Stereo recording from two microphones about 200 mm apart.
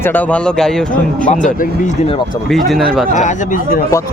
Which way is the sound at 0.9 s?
40° left (ahead or behind).